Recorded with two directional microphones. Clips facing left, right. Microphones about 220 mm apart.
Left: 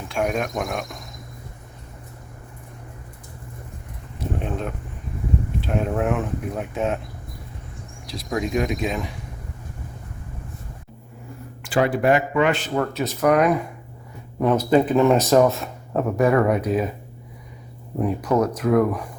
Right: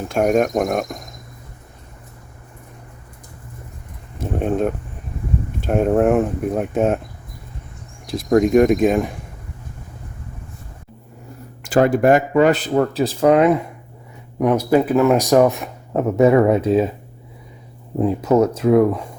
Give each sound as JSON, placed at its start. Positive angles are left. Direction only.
{"t": 0.1, "sound": "speech", "side_deg": -45}
{"t": 4.2, "sound": "a sound", "side_deg": -50}
{"t": 5.5, "sound": "speech", "side_deg": -50}
{"t": 8.0, "sound": "speech", "side_deg": -50}
{"t": 11.6, "sound": "speech", "side_deg": -45}
{"t": 14.3, "sound": "speech", "side_deg": -10}
{"t": 18.0, "sound": "speech", "side_deg": -25}